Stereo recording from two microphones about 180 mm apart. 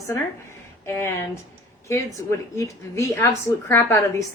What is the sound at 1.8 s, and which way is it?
A woman's voice, 15° left (ahead or behind).